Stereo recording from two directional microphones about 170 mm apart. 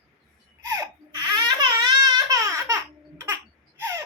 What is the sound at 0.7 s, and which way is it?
Baby cry, 20° right (ahead or behind).